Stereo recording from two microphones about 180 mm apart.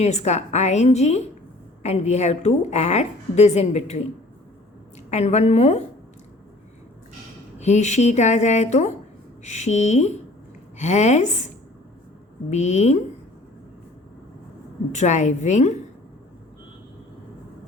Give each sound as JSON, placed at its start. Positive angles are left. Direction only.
{"t": 0.0, "sound": "a woman's voice", "side_deg": 40}
{"t": 5.1, "sound": "a woman's voice", "side_deg": 40}
{"t": 7.6, "sound": "a woman's voice", "side_deg": 40}
{"t": 12.5, "sound": "a woman's voice", "side_deg": 40}
{"t": 14.9, "sound": "a woman's voice", "side_deg": 40}